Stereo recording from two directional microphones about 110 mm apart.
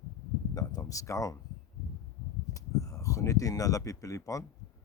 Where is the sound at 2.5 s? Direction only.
30° left (ahead or behind).